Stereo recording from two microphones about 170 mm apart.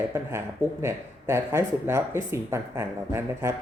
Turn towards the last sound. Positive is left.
turn(degrees=-15)  # may be behind; listen again after turning